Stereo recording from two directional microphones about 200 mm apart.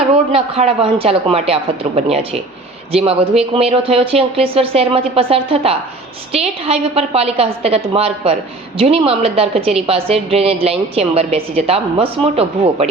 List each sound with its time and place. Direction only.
0.3 s a woman's voice: 30° right (ahead or behind)